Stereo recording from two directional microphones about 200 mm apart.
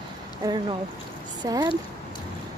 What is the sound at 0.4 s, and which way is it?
Speech, 15° right (ahead or behind).